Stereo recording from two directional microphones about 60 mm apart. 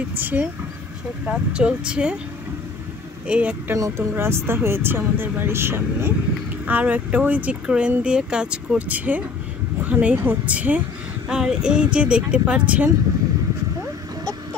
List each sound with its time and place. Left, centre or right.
0.1 s speech: right
1.2 s speech: centre
3.3 s speech: right
3.9 s speech: right
6.6 s speech: right
11.2 s speech: centre